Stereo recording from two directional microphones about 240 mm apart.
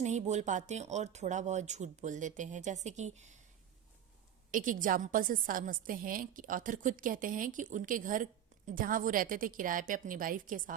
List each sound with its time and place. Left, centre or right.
0.0 s speech: right
4.5 s a woman's voice: right